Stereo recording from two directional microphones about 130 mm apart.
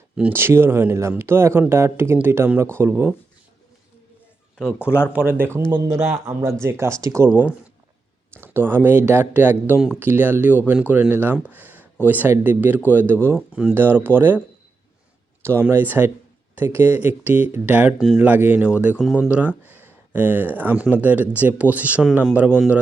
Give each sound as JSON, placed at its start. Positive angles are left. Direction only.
{"t": 0.2, "sound": "speech", "side_deg": -15}
{"t": 4.5, "sound": "speech", "side_deg": 15}
{"t": 5.1, "sound": "speech", "side_deg": -15}
{"t": 6.0, "sound": "a man's voice", "side_deg": -5}
{"t": 6.2, "sound": "speech", "side_deg": -20}
{"t": 8.4, "sound": "speech", "side_deg": -15}
{"t": 15.4, "sound": "speech", "side_deg": -15}